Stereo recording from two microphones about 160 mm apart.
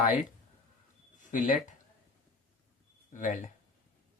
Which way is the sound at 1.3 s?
55° left (ahead or behind).